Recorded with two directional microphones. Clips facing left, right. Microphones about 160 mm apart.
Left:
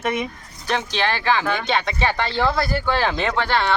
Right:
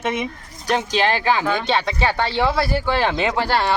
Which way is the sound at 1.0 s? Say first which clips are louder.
Even; 15° right (ahead or behind).